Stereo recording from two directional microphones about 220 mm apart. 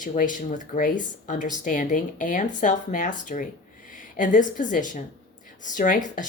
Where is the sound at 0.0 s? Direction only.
35° left (ahead or behind).